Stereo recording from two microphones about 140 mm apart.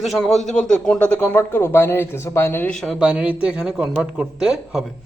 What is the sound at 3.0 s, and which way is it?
A man's voice, 10° right (ahead or behind).